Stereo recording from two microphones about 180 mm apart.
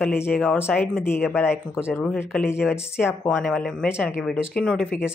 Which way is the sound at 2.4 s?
5° right (ahead or behind).